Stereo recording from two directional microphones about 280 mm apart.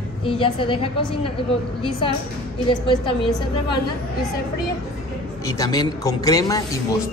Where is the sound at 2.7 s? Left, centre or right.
Centre.